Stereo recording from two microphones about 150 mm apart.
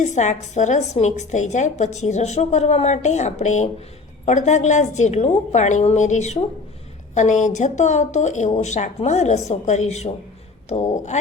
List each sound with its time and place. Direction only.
0.0 s a woman's voice: 50° left (ahead or behind)